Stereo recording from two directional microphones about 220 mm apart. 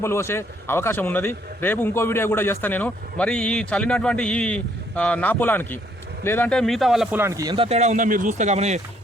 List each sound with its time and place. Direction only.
0.0 s a man's voice: 10° left (ahead or behind); by 8.8 s 30° right (ahead or behind)